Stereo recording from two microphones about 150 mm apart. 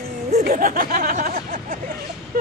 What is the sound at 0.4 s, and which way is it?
Speech, 70° right (ahead or behind).